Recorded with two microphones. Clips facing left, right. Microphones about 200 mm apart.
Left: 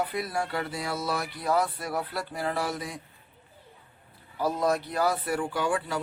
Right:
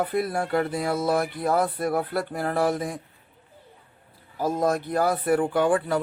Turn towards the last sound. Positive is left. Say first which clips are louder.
# right 7 dB
turn(degrees=-55)  # may be behind; listen again after turning